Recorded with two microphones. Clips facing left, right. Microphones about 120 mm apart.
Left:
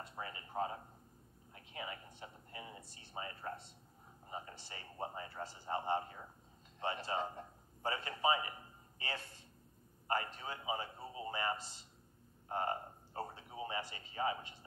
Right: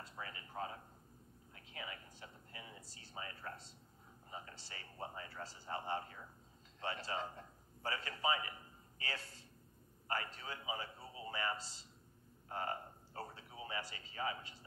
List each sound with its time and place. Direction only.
0.1 s a man's voice: 30° left (ahead or behind)